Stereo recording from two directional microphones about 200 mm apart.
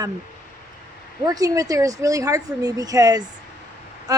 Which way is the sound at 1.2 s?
20° right (ahead or behind).